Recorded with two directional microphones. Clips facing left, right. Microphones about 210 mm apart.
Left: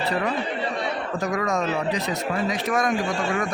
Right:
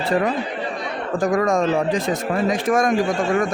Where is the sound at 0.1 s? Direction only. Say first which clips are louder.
Right 8 dB; 45° right (ahead or behind).